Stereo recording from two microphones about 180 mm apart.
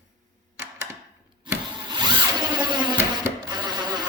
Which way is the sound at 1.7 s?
25° right (ahead or behind).